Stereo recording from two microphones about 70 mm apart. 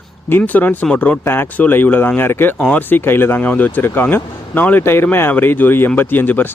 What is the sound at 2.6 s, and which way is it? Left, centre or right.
Speech, left.